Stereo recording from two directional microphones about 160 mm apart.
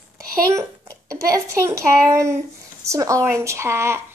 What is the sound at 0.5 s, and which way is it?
A child's voice, 20° right (ahead or behind).